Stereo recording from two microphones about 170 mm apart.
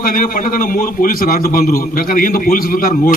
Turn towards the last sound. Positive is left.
turn(degrees=55)  # may be behind; listen again after turning